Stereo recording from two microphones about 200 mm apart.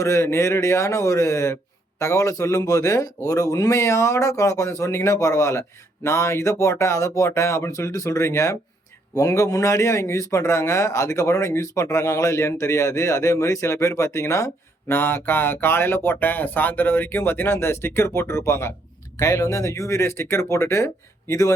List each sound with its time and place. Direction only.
0.0 s a man's voice: 15° left (ahead or behind)